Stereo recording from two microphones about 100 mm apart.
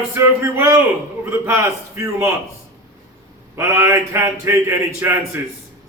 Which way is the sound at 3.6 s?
25° right (ahead or behind).